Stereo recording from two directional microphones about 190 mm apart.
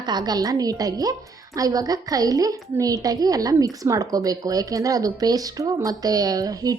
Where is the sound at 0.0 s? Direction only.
20° right (ahead or behind).